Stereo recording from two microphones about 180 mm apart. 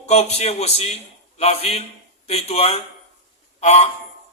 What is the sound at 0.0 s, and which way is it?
A man's voice, 35° left (ahead or behind).